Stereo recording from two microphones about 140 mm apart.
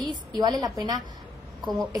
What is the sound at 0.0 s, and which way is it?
A woman's voice, 30° right (ahead or behind).